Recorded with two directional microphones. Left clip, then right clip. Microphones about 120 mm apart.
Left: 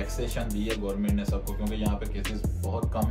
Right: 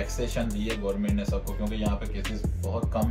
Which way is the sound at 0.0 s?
15° left (ahead or behind).